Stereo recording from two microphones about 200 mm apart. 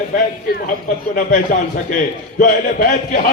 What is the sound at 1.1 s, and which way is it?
Speech, 45° left (ahead or behind).